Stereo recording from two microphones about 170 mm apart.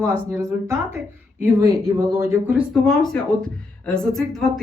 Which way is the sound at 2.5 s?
Centre (ahead or behind).